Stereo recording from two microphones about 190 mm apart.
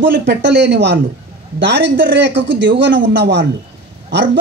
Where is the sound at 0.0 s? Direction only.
65° right (ahead or behind).